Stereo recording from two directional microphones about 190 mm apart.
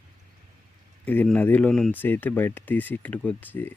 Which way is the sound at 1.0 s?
10° left (ahead or behind).